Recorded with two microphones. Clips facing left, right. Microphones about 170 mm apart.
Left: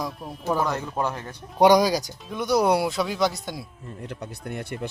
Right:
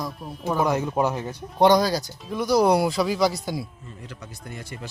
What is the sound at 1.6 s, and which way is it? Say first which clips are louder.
Speech: left 1 dB; 15° left (ahead or behind).